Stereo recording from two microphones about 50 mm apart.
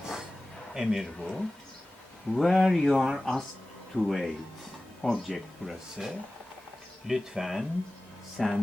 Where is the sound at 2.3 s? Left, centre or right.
Centre.